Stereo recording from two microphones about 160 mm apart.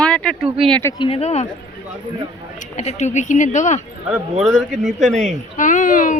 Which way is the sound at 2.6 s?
45° left (ahead or behind).